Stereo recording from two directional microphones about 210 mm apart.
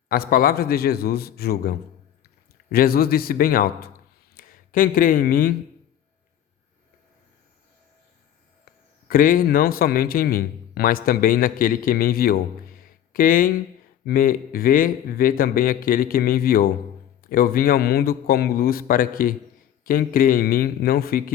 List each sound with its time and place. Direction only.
0.1 s a man's voice: 45° left (ahead or behind)
9.0 s a man's voice: 40° left (ahead or behind)